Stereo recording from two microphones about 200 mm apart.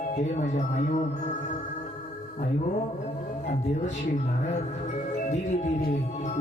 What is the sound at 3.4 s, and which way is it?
Speech, 35° left (ahead or behind).